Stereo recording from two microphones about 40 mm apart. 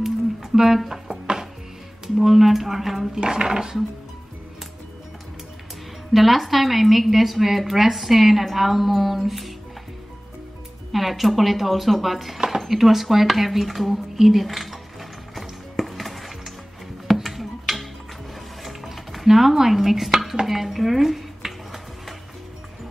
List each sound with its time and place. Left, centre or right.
0.0 s a sound: centre
1.2 s music: centre
2.1 s a woman's voice: centre
3.2 s speech: centre
6.1 s a woman's voice: centre
10.9 s a woman's voice: centre
12.4 s a sound: centre
18.6 s dishes: centre
20.4 s music: centre